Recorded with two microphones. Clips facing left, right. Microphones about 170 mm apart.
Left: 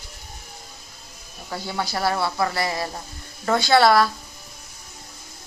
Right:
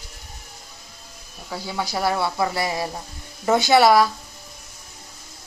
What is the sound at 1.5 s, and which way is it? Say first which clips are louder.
Speech: even; 10° right (ahead or behind).